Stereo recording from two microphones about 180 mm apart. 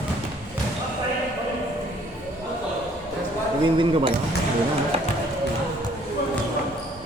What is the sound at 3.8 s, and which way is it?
Speech, 30° right (ahead or behind).